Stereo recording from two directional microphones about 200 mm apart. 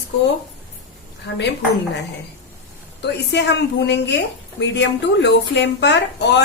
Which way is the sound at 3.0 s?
60° left (ahead or behind).